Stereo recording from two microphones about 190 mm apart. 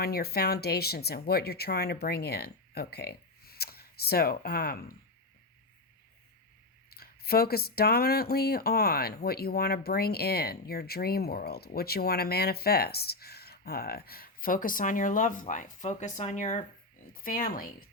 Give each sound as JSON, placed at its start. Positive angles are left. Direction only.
{"t": 0.0, "sound": "speech", "side_deg": 55}
{"t": 6.9, "sound": "speech", "side_deg": 55}